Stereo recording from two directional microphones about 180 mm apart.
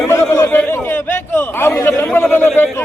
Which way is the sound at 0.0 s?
15° left (ahead or behind).